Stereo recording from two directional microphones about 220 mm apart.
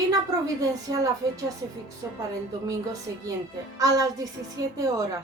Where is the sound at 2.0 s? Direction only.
10° right (ahead or behind).